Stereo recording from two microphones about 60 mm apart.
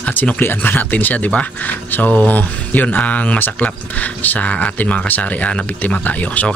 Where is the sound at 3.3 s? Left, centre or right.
Left.